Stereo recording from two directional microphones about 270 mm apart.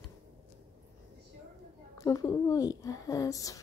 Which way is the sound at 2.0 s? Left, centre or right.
Centre.